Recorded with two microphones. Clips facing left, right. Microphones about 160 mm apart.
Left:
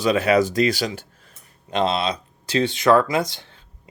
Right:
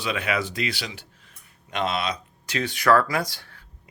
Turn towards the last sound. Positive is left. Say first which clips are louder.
# left 5 dB
turn(degrees=20)  # may be behind; listen again after turning